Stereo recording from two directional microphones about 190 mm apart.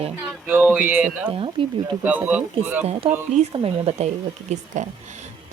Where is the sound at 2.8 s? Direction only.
30° right (ahead or behind).